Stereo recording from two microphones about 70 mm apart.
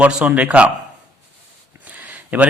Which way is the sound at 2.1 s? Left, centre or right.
Right.